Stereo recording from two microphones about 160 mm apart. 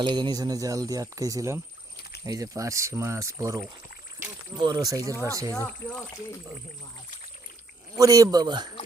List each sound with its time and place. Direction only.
0.0 s speech: 25° right (ahead or behind)
5.5 s speech: 20° left (ahead or behind)
7.9 s speech: 20° right (ahead or behind)